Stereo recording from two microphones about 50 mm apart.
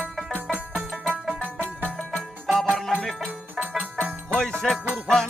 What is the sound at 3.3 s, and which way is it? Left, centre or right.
Music, right.